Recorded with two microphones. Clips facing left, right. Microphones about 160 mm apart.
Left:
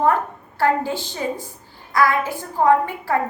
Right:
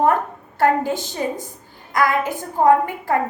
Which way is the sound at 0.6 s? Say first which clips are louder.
Right 2 dB; 15° right (ahead or behind).